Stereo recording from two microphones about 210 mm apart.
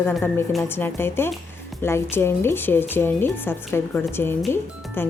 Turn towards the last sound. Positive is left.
turn(degrees=10)  # may be behind; listen again after turning